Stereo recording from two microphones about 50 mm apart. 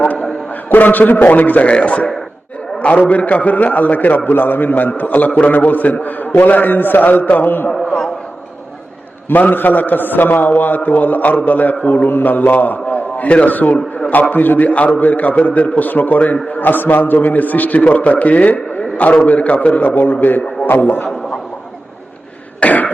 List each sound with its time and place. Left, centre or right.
0.7 s a man's voice: left
9.3 s a man's voice: left
22.6 s cough: left